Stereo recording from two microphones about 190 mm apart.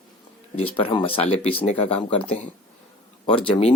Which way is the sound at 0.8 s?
25° left (ahead or behind).